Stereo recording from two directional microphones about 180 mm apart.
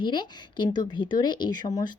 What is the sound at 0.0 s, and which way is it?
Speech, 25° left (ahead or behind).